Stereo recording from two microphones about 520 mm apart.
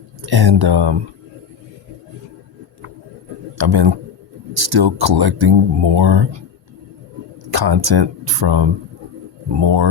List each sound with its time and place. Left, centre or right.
0.2 s speech: right
3.6 s speech: right
7.5 s speech: right